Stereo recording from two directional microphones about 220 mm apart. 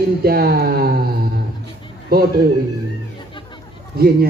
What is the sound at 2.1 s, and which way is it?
Speech, 45° right (ahead or behind).